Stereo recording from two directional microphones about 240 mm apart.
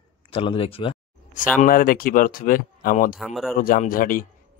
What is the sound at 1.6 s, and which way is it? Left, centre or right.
Speech, left.